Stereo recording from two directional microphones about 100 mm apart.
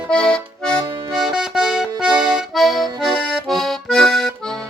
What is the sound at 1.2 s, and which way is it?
Music, 5° right (ahead or behind).